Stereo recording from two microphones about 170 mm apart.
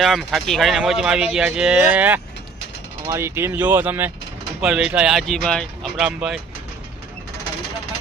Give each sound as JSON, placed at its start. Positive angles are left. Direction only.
{"t": 0.0, "sound": "speech", "side_deg": 0}